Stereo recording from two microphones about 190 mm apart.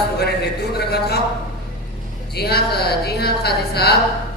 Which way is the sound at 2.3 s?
55° left (ahead or behind).